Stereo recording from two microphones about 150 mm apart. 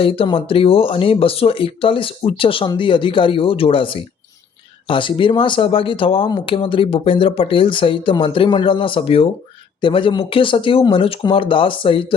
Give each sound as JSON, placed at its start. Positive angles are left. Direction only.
{"t": 0.0, "sound": "speech", "side_deg": 40}